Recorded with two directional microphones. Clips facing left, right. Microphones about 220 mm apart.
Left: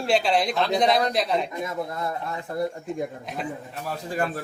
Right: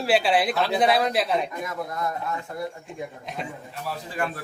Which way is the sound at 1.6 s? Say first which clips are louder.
Left 1 dB; 25° left (ahead or behind).